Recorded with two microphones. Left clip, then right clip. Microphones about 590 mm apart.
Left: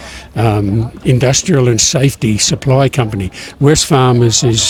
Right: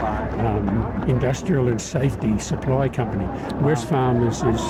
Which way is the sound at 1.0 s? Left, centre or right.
Left.